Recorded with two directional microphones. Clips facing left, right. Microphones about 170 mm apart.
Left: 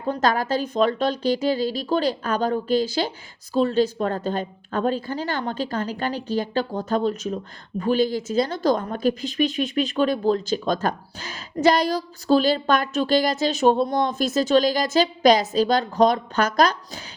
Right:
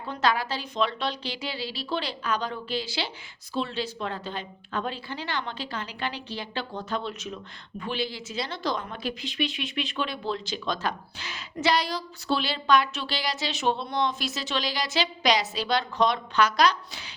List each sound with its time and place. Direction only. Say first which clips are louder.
0.0 s a woman's voice: left 5 dB; 45° left (ahead or behind)